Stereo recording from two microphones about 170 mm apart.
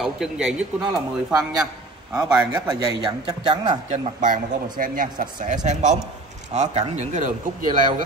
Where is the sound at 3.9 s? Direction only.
50° right (ahead or behind).